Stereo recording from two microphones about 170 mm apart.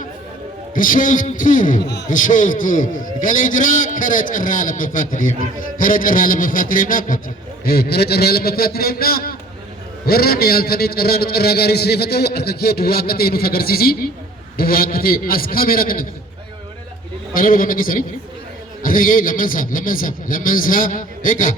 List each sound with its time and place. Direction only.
0.7 s a man's voice: 50° left (ahead or behind)
1.8 s a man's voice: 90° left
2.0 s a man's voice: 50° left (ahead or behind)
7.6 s a man's voice: 65° left (ahead or behind)
17.3 s a man's voice: 55° left (ahead or behind)